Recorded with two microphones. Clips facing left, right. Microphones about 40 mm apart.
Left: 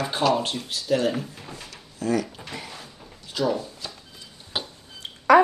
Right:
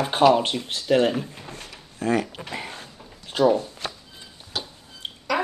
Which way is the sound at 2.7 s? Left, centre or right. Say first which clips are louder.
Right 2 dB; right.